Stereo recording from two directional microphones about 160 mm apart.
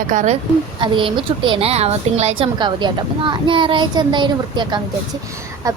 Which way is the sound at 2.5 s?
30° right (ahead or behind).